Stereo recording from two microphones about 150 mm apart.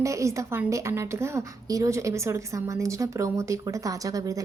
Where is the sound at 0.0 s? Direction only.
20° right (ahead or behind).